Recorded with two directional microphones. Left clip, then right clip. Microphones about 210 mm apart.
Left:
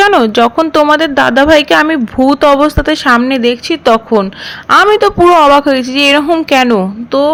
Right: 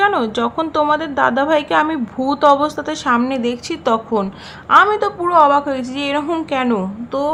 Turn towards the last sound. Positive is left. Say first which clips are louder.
# left 9 dB
turn(degrees=20)  # may be behind; listen again after turning